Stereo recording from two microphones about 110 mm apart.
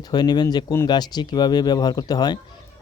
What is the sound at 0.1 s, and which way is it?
Speech, 40° left (ahead or behind).